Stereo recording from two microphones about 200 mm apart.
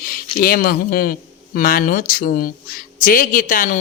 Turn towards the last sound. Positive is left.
turn(degrees=45)  # may be behind; listen again after turning